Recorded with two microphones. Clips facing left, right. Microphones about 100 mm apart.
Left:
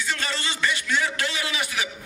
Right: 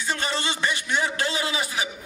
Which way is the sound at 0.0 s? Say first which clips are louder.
Right 2 dB; 25° right (ahead or behind).